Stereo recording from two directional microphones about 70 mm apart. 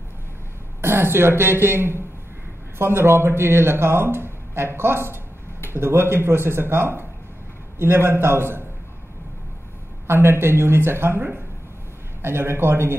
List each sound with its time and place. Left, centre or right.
0.7 s speech: right
10.0 s speech: right